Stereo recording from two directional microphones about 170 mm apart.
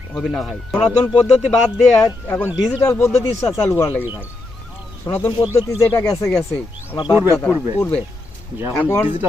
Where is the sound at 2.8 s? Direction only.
15° left (ahead or behind).